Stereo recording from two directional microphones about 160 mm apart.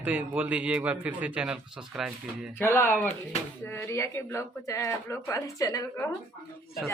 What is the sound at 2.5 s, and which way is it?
Speech, 15° left (ahead or behind).